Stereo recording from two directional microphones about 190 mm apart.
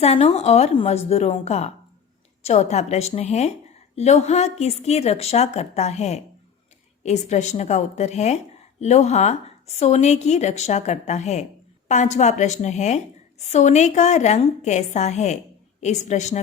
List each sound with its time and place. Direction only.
0.0 s speech: 35° left (ahead or behind)